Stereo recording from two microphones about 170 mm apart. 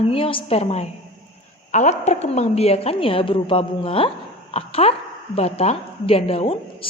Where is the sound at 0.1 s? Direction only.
30° left (ahead or behind).